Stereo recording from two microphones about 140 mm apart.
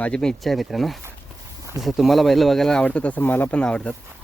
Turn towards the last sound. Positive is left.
turn(degrees=10)  # may be behind; listen again after turning